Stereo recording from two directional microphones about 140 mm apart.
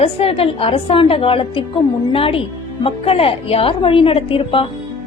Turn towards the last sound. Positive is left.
turn(degrees=40)  # may be behind; listen again after turning